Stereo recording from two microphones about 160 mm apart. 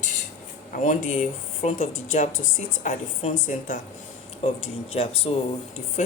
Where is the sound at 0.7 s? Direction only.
50° left (ahead or behind).